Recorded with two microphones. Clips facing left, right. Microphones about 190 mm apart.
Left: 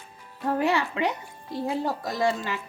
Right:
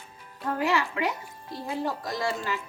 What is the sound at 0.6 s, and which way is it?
Speech, 25° left (ahead or behind).